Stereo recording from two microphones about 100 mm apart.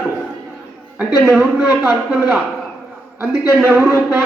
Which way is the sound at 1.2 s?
10° right (ahead or behind).